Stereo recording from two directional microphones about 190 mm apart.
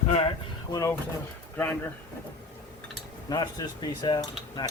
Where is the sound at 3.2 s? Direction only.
20° left (ahead or behind).